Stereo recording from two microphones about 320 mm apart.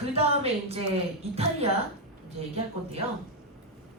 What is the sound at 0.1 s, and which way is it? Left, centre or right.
Speech, centre.